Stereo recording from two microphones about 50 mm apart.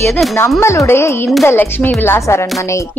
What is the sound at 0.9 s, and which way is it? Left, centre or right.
Speech, left.